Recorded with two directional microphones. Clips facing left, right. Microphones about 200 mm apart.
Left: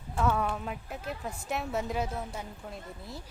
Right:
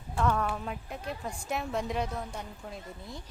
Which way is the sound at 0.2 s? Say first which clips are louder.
Even; 5° left (ahead or behind).